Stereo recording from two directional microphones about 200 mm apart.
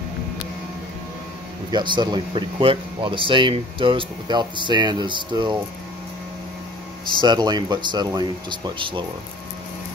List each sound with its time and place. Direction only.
1.7 s speech: 20° right (ahead or behind)
7.2 s speech: 20° right (ahead or behind)